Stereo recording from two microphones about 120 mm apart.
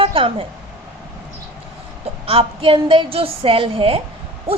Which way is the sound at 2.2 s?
50° right (ahead or behind).